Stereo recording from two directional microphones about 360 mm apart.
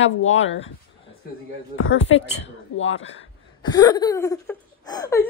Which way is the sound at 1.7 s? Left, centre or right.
Left.